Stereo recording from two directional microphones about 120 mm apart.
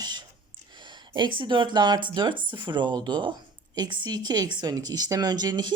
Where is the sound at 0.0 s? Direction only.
35° right (ahead or behind).